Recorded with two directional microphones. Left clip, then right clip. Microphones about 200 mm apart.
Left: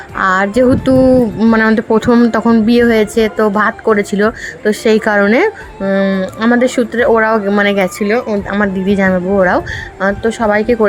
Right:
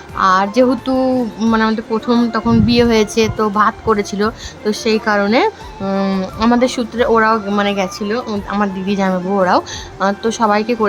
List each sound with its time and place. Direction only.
0.2 s speech: 20° left (ahead or behind)
5.8 s speech: 5° left (ahead or behind)